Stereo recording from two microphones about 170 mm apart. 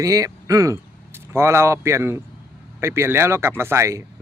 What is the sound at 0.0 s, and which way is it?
Speech, 20° right (ahead or behind).